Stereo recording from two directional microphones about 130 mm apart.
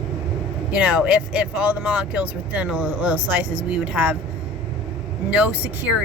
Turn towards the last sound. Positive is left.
turn(degrees=-10)  # may be behind; listen again after turning